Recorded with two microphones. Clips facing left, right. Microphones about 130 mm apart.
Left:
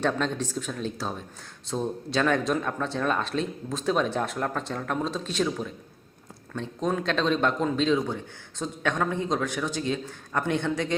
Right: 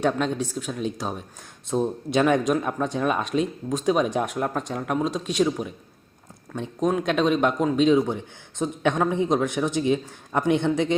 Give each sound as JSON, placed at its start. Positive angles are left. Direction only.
{"t": 0.0, "sound": "a man's voice", "side_deg": -10}